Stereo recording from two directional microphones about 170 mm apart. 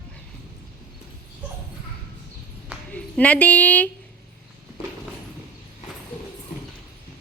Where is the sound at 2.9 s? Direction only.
10° left (ahead or behind).